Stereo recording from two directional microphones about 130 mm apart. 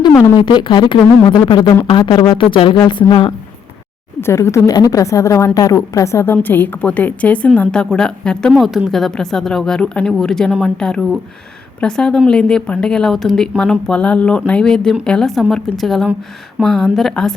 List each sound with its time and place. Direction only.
0.4 s speech: 35° left (ahead or behind)
4.2 s a woman's voice: 20° left (ahead or behind); by 17.3 s 5° left (ahead or behind)